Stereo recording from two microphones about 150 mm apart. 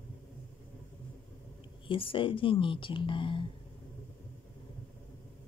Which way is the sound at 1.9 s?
35° left (ahead or behind).